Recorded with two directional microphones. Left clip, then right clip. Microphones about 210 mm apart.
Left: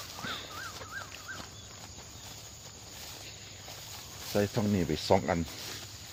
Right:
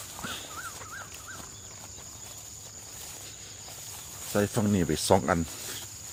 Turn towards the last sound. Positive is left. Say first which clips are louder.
# right 3 dB
turn(degrees=-30)  # may be behind; listen again after turning